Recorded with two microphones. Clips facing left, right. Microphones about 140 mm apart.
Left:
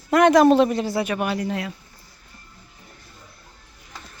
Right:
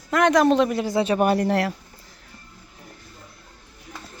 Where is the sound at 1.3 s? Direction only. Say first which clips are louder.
Right 5 dB; 60° right (ahead or behind).